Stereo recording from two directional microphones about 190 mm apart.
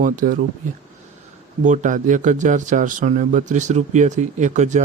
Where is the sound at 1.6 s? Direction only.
40° right (ahead or behind).